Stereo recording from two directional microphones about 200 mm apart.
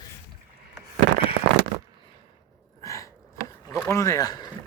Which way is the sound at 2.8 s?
15° left (ahead or behind).